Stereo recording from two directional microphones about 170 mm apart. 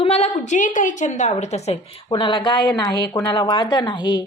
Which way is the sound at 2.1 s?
30° left (ahead or behind).